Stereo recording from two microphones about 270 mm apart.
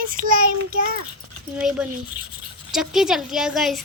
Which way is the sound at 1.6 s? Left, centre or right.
Centre.